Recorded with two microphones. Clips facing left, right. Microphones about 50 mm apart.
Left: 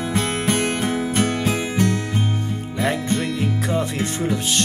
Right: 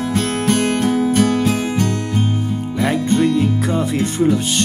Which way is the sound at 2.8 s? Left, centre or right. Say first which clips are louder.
Right 6 dB; centre.